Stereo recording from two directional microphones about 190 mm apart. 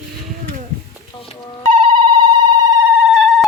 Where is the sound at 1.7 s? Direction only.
30° right (ahead or behind).